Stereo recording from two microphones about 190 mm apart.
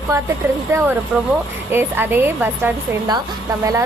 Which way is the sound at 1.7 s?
10° right (ahead or behind).